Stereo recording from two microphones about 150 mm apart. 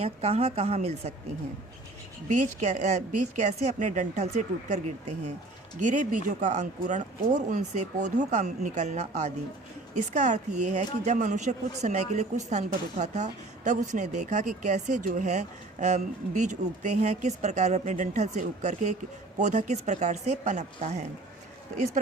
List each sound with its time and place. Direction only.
0.0 s a woman's voice: 45° right (ahead or behind)
2.3 s a woman's voice: 55° right (ahead or behind)